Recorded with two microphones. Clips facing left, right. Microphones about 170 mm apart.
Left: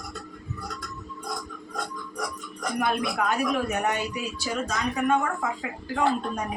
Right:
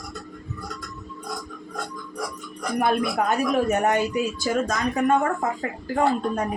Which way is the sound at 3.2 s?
45° right (ahead or behind).